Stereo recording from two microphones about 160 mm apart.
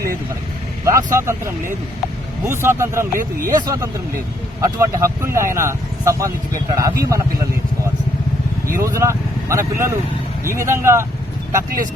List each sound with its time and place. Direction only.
0.9 s speech: 20° right (ahead or behind)
8.6 s speech: 20° right (ahead or behind)